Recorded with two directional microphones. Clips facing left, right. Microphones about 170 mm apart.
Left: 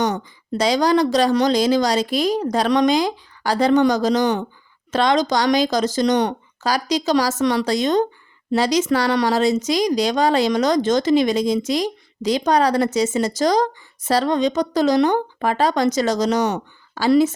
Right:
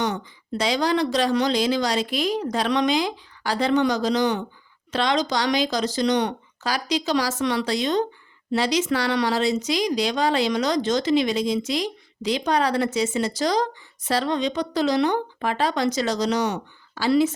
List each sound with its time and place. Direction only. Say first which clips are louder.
0.0 s a woman's voice: left 4 dB; 45° left (ahead or behind)